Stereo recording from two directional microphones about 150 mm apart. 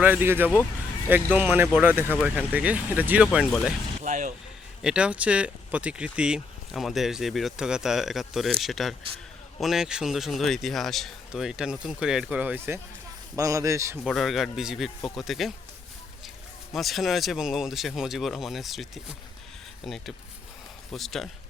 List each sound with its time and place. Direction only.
0.0 s speech: 15° right (ahead or behind)
4.0 s speech: 55° right (ahead or behind)
4.8 s a man's voice: 5° right (ahead or behind)
14.0 s speech: centre (ahead or behind)
16.7 s speech: centre (ahead or behind)